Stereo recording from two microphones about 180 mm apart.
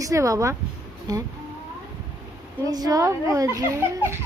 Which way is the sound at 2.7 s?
20° right (ahead or behind).